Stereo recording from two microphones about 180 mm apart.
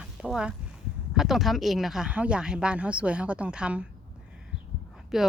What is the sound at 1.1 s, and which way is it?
Speech, centre (ahead or behind).